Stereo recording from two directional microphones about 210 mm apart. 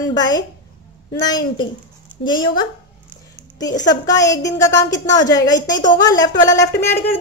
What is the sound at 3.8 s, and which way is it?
A woman's voice, 15° left (ahead or behind).